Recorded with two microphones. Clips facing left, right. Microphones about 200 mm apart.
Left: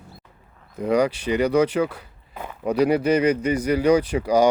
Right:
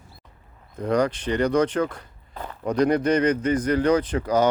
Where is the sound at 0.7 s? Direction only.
10° left (ahead or behind).